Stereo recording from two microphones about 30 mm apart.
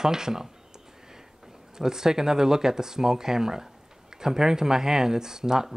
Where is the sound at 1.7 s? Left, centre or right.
Centre.